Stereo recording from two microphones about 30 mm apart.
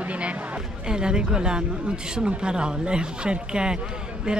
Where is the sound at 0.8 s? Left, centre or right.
Right.